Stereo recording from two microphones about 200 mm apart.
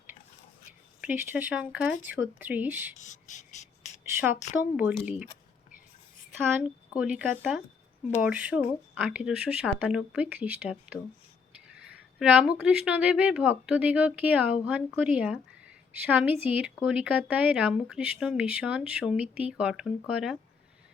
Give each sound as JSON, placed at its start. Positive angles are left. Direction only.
{"t": 1.0, "sound": "speech", "side_deg": -5}
{"t": 3.0, "sound": "a sound", "side_deg": 40}
{"t": 4.9, "sound": "speech", "side_deg": -5}
{"t": 6.5, "sound": "speech", "side_deg": -5}